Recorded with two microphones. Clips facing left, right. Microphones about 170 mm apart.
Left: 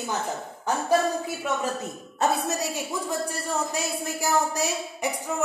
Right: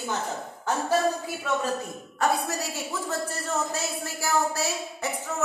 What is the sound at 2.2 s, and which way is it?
Music, 20° left (ahead or behind).